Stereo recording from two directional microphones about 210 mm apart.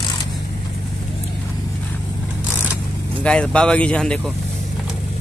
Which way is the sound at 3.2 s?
5° left (ahead or behind).